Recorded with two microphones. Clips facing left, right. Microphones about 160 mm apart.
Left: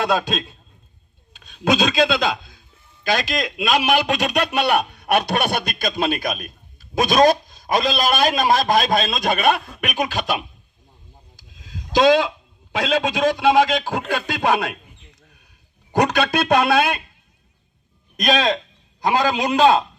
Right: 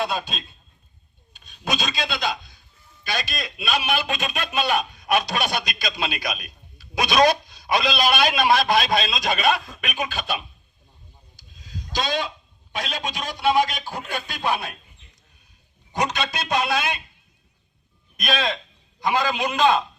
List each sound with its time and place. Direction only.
0.0 s speech: 90° left
1.3 s a sound: 90° left
3.0 s a man's voice: 90° left
11.3 s a sound: 90° left
12.7 s speech: 90° left
15.9 s speech: 60° left (ahead or behind)
18.2 s a man's voice: 40° left (ahead or behind)